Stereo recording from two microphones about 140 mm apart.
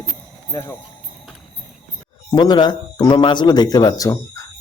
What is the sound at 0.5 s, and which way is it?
Speech, 25° left (ahead or behind).